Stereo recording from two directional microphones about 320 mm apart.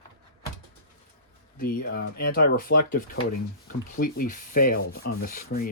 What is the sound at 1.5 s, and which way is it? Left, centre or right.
Speech, left.